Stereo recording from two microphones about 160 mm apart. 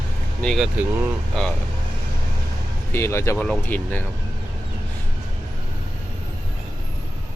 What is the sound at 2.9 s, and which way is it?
Speech, 15° left (ahead or behind).